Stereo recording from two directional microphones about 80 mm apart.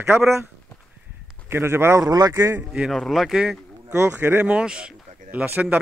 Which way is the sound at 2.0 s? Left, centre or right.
Right.